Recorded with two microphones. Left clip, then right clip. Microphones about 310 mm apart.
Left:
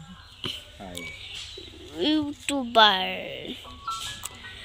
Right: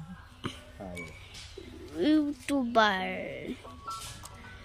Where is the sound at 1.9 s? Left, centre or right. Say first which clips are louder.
Left 1 dB; centre.